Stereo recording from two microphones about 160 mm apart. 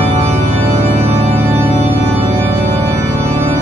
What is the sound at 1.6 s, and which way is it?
Organ, 10° right (ahead or behind).